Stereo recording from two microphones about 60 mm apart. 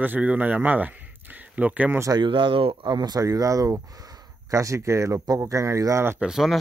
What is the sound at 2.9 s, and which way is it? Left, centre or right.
Speech, right.